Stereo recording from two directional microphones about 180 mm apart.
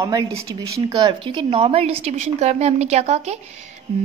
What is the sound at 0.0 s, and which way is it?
A woman's voice, 20° right (ahead or behind).